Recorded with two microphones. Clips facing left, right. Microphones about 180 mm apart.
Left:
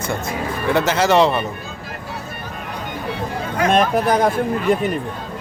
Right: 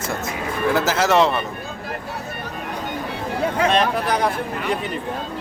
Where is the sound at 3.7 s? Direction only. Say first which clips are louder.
Left 4 dB; 45° left (ahead or behind).